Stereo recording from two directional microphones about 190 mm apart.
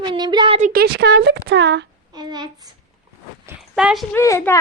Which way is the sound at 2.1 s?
20° right (ahead or behind).